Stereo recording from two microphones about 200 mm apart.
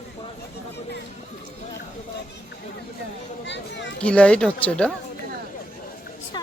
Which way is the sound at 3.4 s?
60° left (ahead or behind).